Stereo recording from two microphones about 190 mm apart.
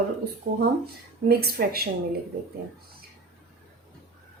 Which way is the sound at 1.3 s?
55° right (ahead or behind).